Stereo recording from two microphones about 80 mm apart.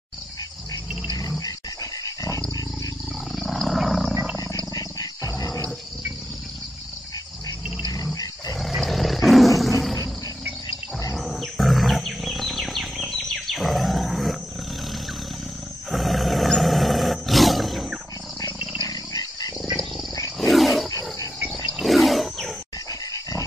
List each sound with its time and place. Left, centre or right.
1.4 s dog: left
3.3 s wild animals: centre
4.7 s wild animals: left
7.9 s roar: left
8.5 s roar: centre
11.1 s wild animals: centre
15.9 s roar: centre
18.8 s dog: left
20.3 s wild animals: centre
22.8 s dog: left